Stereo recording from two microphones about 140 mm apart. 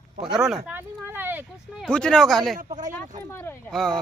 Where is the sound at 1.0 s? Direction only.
15° right (ahead or behind).